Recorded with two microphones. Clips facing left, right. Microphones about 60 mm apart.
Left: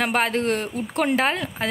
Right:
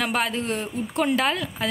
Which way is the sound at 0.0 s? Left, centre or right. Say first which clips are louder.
Left 3 dB; left.